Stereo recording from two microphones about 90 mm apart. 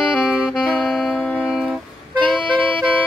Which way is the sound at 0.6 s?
Centre (ahead or behind).